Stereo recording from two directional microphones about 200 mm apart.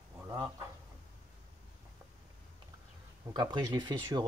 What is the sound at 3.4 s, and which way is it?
Speech, 20° right (ahead or behind).